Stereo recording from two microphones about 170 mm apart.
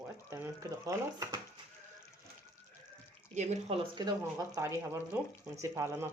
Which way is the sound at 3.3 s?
45° right (ahead or behind).